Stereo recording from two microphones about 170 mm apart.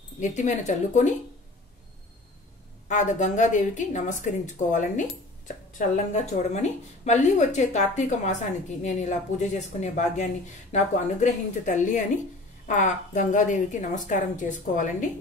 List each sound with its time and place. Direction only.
0.2 s speech: 45° left (ahead or behind)
2.9 s speech: 45° left (ahead or behind)
6.3 s speech: 40° left (ahead or behind)